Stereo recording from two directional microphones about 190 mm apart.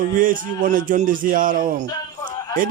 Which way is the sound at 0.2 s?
45° right (ahead or behind).